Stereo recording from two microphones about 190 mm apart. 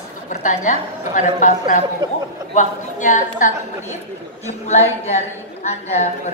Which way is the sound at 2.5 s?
40° left (ahead or behind).